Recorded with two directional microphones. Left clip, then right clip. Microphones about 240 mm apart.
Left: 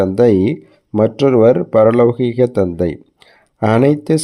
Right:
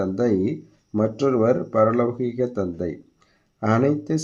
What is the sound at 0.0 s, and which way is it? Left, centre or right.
Speech, left.